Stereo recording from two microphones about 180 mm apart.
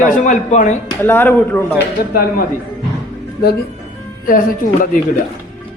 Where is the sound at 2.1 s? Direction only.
55° left (ahead or behind).